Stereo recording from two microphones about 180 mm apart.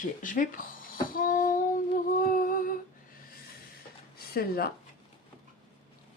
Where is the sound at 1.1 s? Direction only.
50° left (ahead or behind).